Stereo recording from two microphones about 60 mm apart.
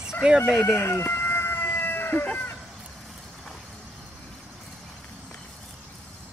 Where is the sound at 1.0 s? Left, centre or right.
Left.